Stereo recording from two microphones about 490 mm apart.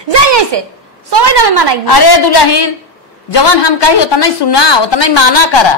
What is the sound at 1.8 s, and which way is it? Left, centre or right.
A woman's voice, left.